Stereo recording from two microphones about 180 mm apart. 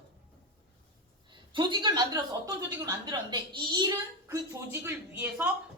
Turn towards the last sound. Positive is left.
turn(degrees=-10)  # may be behind; listen again after turning